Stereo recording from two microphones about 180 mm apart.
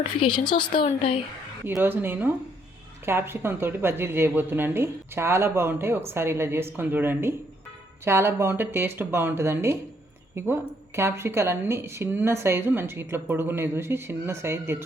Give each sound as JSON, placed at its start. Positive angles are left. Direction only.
{"t": 0.2, "sound": "speech", "side_deg": 25}
{"t": 1.6, "sound": "speech", "side_deg": -10}